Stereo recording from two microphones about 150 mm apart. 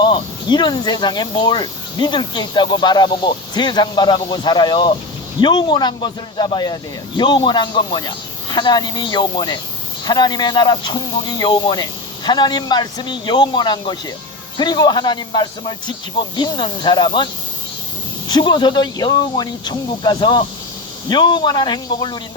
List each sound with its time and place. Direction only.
0.0 s speech: 30° left (ahead or behind)
18.3 s speech: 30° left (ahead or behind)